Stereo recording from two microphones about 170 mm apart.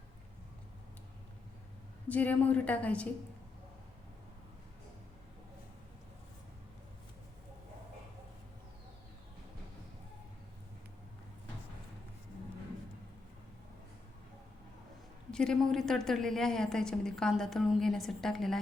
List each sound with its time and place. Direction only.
2.0 s a woman's voice: 10° left (ahead or behind)
15.3 s a woman's voice: 5° left (ahead or behind)